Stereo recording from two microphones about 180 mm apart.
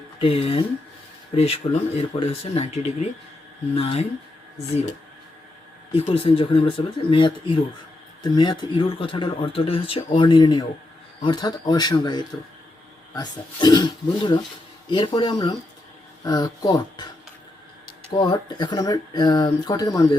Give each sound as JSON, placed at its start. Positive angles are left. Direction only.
{"t": 0.2, "sound": "speech", "side_deg": 30}
{"t": 5.9, "sound": "speech", "side_deg": 30}
{"t": 18.1, "sound": "speech", "side_deg": 25}